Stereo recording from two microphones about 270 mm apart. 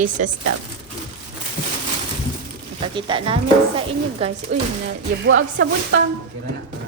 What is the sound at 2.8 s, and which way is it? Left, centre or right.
Speech, centre.